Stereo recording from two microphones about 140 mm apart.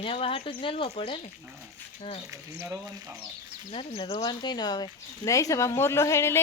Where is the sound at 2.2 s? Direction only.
20° right (ahead or behind).